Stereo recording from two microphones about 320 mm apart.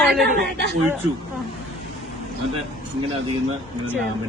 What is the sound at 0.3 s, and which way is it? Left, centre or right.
Speech, right.